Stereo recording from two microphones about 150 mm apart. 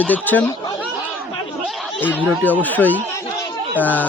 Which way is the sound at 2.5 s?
10° left (ahead or behind).